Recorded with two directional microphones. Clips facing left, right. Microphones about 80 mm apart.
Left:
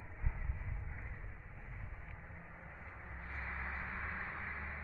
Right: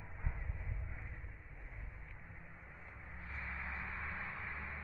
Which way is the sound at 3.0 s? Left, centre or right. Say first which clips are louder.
Left 1 dB; left.